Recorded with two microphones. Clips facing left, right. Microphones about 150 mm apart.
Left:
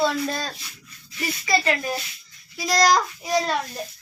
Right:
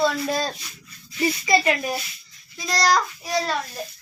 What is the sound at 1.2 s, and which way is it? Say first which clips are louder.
Speech: right 4 dB; 20° right (ahead or behind).